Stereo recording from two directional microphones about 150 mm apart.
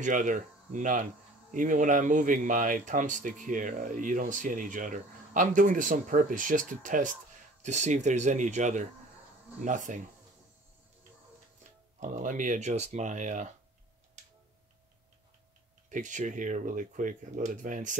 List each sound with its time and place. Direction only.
0.0 s speech: 60° right (ahead or behind)
12.0 s speech: 55° right (ahead or behind)
15.9 s speech: 55° right (ahead or behind)